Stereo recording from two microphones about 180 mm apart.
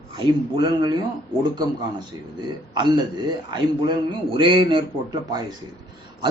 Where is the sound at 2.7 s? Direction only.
25° right (ahead or behind).